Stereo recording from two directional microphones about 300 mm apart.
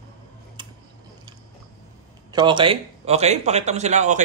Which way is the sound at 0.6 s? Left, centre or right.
Centre.